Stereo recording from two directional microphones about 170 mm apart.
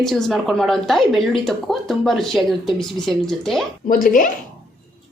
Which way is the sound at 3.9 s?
55° left (ahead or behind).